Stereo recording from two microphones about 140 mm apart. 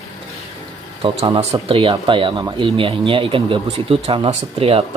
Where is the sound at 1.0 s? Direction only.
40° right (ahead or behind).